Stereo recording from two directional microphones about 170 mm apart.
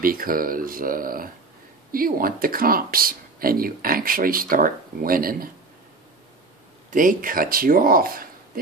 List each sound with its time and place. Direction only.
0.0 s speech: 55° right (ahead or behind)
6.9 s speech: 50° right (ahead or behind)